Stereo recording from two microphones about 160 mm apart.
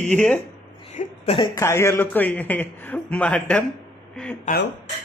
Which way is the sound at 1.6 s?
15° left (ahead or behind).